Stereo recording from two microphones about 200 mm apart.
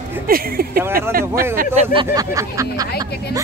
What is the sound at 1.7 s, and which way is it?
Speech, 30° right (ahead or behind).